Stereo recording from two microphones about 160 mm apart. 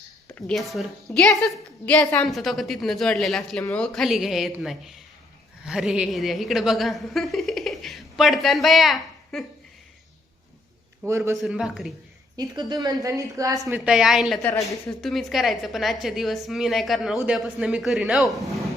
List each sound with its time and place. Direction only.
0.3 s a woman's voice: 5° left (ahead or behind)
11.0 s a man's voice: 20° right (ahead or behind)
11.3 s a woman's voice: centre (ahead or behind)
12.4 s a woman's voice: 25° right (ahead or behind)
13.7 s a woman's voice: 5° right (ahead or behind)